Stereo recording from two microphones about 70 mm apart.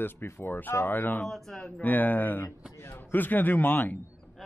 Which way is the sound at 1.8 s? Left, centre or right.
Left.